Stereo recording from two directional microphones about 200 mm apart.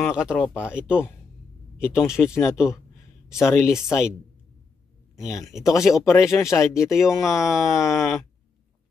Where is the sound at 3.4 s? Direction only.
Centre (ahead or behind).